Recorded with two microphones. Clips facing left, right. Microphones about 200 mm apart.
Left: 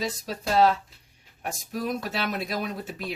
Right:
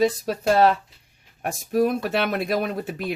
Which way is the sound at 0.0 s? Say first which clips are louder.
Right 10 dB; 55° right (ahead or behind).